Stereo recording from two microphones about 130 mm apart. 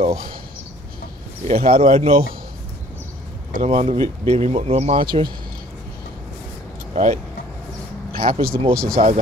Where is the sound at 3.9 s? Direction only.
50° right (ahead or behind).